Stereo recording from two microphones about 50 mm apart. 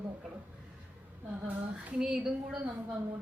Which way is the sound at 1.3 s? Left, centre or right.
Right.